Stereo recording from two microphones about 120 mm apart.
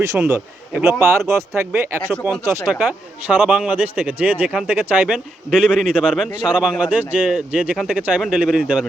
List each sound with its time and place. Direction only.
0.2 s a man's voice: 15° right (ahead or behind)
0.9 s speech: centre (ahead or behind)
1.7 s speech: 20° right (ahead or behind)
2.7 s a man's voice: 10° right (ahead or behind)